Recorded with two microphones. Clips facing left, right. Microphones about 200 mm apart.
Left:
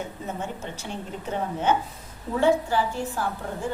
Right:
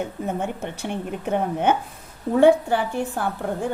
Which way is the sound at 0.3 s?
55° right (ahead or behind).